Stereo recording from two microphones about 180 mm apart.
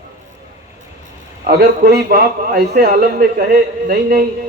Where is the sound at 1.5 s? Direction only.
60° right (ahead or behind).